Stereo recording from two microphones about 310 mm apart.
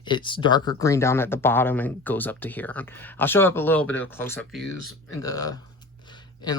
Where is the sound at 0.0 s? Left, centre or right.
Centre.